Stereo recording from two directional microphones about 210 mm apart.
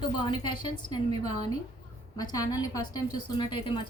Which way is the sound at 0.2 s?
20° left (ahead or behind).